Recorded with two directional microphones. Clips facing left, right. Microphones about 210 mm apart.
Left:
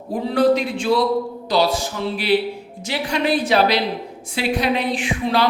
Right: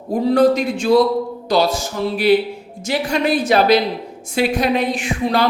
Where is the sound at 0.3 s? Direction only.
45° right (ahead or behind).